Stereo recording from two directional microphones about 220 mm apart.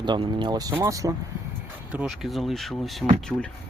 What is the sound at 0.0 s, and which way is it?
Speech, 20° right (ahead or behind).